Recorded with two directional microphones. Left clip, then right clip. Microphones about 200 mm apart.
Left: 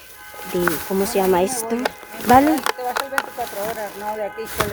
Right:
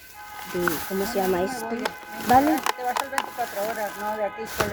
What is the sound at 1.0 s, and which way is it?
Speech, 35° left (ahead or behind).